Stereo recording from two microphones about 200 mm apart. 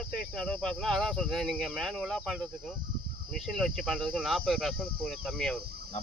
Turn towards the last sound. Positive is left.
turn(degrees=5)  # may be behind; listen again after turning